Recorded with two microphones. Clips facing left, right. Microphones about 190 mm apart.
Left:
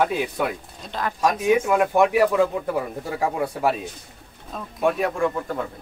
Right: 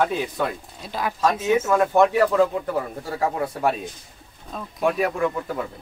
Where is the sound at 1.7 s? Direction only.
10° left (ahead or behind).